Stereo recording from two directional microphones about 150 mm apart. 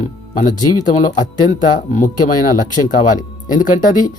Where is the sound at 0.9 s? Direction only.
55° left (ahead or behind).